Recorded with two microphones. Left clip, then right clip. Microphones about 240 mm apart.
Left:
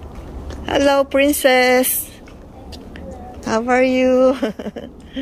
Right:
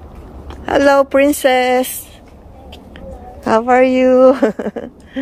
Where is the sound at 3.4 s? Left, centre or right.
Centre.